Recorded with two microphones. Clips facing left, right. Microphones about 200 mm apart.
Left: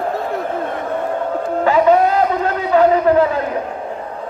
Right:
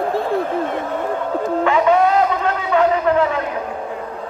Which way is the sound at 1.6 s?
35° left (ahead or behind).